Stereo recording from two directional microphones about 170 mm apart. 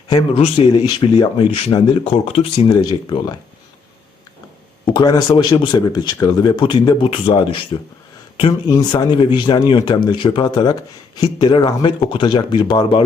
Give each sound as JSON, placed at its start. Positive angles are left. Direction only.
{"t": 0.1, "sound": "speech", "side_deg": 35}
{"t": 4.9, "sound": "speech", "side_deg": 25}